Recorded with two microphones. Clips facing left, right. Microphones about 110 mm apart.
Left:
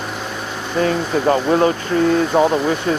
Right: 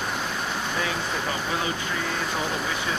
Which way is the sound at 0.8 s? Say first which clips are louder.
Left 16 dB; 50° left (ahead or behind).